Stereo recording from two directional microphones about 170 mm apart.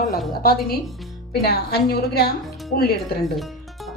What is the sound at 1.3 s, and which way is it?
A woman's voice, 65° left (ahead or behind).